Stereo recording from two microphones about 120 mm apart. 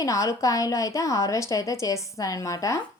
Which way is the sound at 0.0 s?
30° left (ahead or behind).